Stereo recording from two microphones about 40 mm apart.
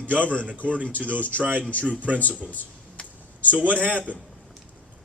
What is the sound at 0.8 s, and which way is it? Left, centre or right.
Speech, left.